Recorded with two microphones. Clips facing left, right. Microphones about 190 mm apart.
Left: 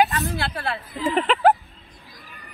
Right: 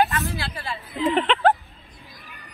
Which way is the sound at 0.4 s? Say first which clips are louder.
Left 4 dB; 60° left (ahead or behind).